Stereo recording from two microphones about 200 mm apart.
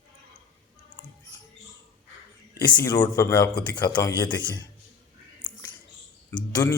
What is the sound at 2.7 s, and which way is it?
A man's voice, 20° left (ahead or behind).